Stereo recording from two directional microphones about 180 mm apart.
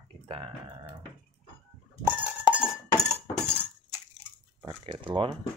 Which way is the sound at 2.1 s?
5° right (ahead or behind).